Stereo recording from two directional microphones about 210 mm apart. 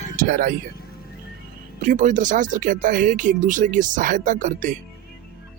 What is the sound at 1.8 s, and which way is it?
Speech, 35° right (ahead or behind).